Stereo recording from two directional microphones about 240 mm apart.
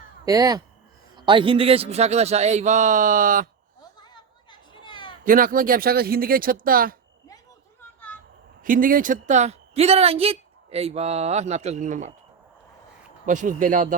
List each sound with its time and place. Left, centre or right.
0.3 s speech: centre; by 3.5 s right
4.0 s a sound: centre
5.2 s speech: right
8.6 s speech: right
13.2 s speech: right